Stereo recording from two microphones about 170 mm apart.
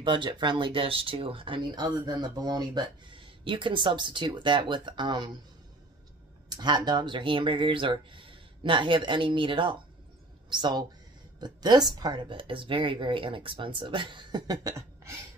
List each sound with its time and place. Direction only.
0.0 s speech: 30° right (ahead or behind)
6.5 s speech: 25° right (ahead or behind)